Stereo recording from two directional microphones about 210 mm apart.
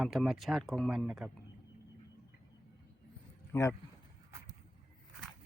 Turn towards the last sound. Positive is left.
turn(degrees=15)  # may be behind; listen again after turning